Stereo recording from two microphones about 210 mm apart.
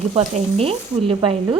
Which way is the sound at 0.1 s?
30° right (ahead or behind).